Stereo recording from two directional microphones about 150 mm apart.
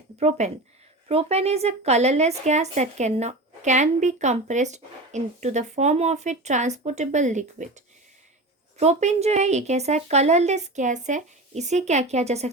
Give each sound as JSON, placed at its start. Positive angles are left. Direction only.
{"t": 0.2, "sound": "a woman's voice", "side_deg": -45}
{"t": 8.8, "sound": "a woman's voice", "side_deg": -50}